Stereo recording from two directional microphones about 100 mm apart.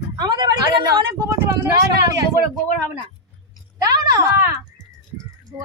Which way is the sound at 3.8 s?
35° right (ahead or behind).